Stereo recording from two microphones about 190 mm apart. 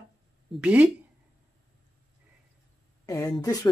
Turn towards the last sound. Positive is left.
turn(degrees=15)  # may be behind; listen again after turning